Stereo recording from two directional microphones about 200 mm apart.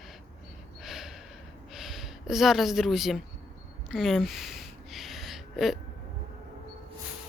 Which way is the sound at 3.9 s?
Centre (ahead or behind).